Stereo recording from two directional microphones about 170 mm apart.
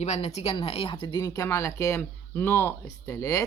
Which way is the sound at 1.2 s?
20° left (ahead or behind).